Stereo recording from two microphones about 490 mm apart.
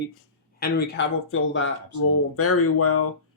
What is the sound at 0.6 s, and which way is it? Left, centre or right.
Speech, centre.